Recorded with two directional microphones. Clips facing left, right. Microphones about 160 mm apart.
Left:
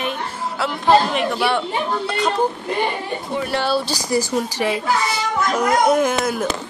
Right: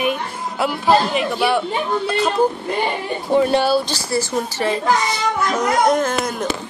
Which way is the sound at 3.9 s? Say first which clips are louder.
Left 1 dB; 15° left (ahead or behind).